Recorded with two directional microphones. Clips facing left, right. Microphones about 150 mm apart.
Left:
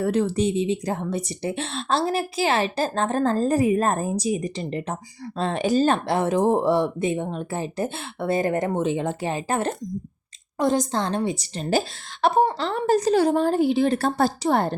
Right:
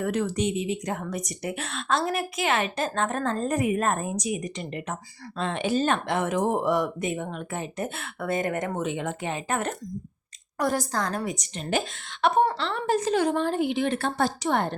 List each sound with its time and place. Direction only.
0.0 s a woman's voice: 30° left (ahead or behind)